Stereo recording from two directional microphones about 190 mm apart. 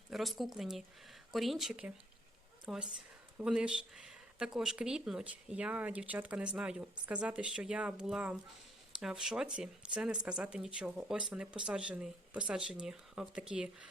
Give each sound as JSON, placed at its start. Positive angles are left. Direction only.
{"t": 0.1, "sound": "speech", "side_deg": 0}